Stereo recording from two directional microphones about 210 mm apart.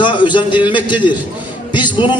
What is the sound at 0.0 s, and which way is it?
Speech, 20° left (ahead or behind).